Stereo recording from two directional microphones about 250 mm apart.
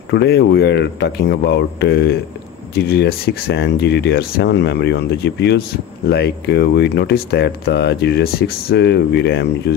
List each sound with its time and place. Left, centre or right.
0.1 s speech: left